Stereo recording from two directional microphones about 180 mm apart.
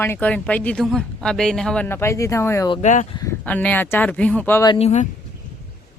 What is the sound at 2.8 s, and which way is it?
Speech, 40° left (ahead or behind).